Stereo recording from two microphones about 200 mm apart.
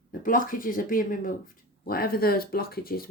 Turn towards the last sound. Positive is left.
turn(degrees=50)  # may be behind; listen again after turning